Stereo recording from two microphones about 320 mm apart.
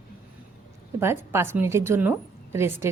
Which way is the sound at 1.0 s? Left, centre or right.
Centre.